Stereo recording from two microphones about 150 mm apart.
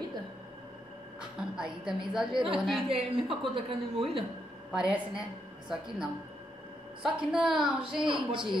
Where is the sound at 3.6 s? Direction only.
35° right (ahead or behind).